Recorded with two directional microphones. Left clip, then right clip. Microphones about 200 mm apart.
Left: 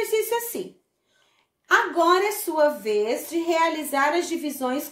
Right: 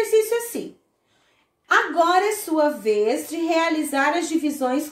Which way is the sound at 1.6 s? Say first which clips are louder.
Right 1 dB; 40° left (ahead or behind).